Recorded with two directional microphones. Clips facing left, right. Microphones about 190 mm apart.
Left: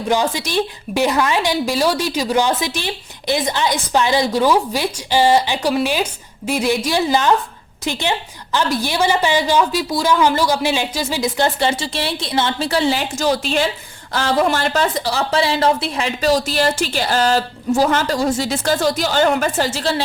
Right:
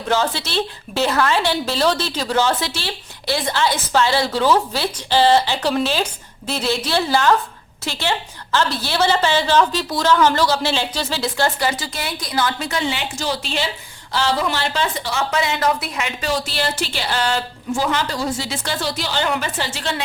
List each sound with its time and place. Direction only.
0.1 s a woman's voice: 15° left (ahead or behind); by 20.0 s 35° left (ahead or behind)